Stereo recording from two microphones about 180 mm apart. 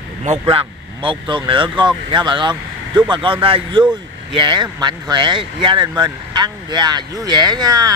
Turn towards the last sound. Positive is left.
turn(degrees=-20)  # may be behind; listen again after turning